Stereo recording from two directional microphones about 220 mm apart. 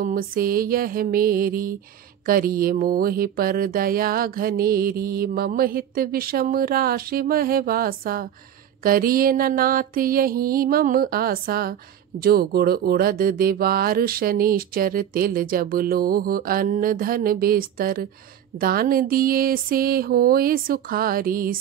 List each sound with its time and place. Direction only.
0.0 s mantra: 40° right (ahead or behind)